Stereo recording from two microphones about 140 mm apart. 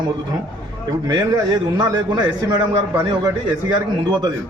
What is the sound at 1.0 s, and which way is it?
A man's voice, 25° right (ahead or behind).